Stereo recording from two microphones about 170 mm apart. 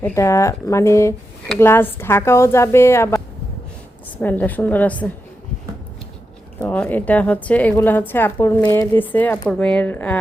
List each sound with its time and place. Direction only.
0.0 s speech: 15° left (ahead or behind)
4.2 s speech: 10° left (ahead or behind)
6.6 s speech: 10° left (ahead or behind)